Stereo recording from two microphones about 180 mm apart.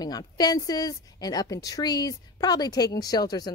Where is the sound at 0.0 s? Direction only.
20° left (ahead or behind).